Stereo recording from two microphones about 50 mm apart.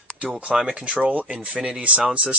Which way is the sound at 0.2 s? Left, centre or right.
Right.